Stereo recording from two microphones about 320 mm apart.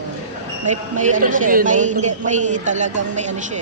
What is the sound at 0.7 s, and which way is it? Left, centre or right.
A man's voice, right.